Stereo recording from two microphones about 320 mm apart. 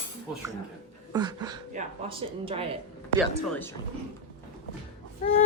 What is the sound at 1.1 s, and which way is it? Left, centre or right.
A woman's voice, centre.